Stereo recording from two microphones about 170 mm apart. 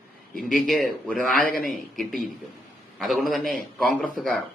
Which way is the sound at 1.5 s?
55° left (ahead or behind).